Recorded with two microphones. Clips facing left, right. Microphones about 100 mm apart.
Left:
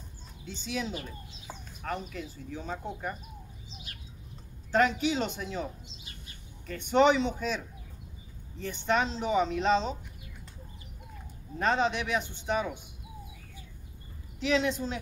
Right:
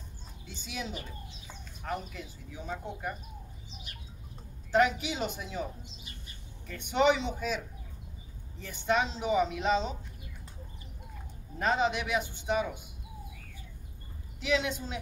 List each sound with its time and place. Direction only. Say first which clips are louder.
0.5 s speech: left 5 dB; 5° right (ahead or behind)
2.5 s speech: left 1 dB; 40° left (ahead or behind)
4.7 s speech: left 1 dB; 10° right (ahead or behind)
7.0 s speech: left 3 dB; 5° right (ahead or behind)
11.5 s speech: left 1 dB; 5° right (ahead or behind)
14.4 s speech: left 3 dB; 5° right (ahead or behind)